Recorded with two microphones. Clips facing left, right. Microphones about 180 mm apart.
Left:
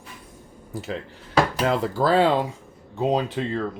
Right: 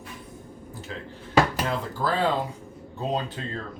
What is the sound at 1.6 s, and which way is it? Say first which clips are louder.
Speech: left 7 dB; 85° left.